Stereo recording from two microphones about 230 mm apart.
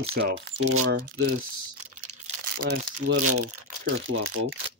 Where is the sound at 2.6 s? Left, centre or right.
Right.